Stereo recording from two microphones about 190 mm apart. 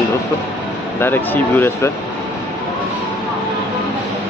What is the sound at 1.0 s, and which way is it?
Speech, 10° left (ahead or behind).